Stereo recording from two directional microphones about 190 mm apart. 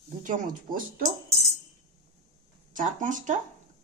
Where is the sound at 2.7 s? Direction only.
40° right (ahead or behind).